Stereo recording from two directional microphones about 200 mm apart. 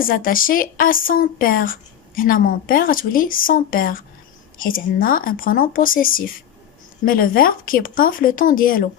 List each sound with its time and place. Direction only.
0.0 s speech: 45° left (ahead or behind)